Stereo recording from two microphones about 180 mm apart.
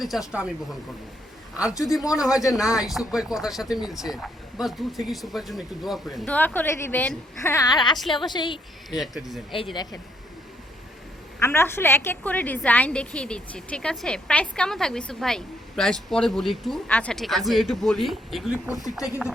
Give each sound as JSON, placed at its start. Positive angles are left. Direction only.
{"t": 0.0, "sound": "a woman's voice", "side_deg": 0}
{"t": 1.8, "sound": "a woman's voice", "side_deg": 0}
{"t": 9.0, "sound": "a woman's voice", "side_deg": 0}
{"t": 11.3, "sound": "a woman's voice", "side_deg": 15}